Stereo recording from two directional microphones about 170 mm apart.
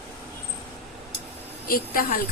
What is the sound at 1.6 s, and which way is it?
Speech, 55° left (ahead or behind).